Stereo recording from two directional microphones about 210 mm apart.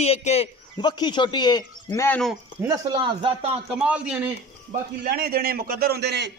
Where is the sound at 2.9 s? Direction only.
25° right (ahead or behind).